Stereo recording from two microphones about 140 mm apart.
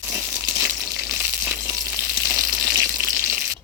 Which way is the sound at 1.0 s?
15° right (ahead or behind).